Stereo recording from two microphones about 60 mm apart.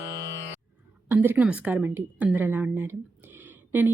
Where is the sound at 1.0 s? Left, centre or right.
Right.